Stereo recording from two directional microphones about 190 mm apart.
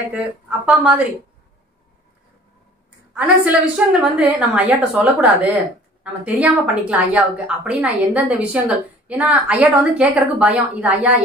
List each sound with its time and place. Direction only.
0.1 s a woman's voice: 5° right (ahead or behind)
3.2 s a woman's voice: 5° right (ahead or behind)